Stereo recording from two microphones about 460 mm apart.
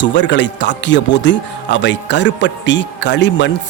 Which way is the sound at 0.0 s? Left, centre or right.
Left.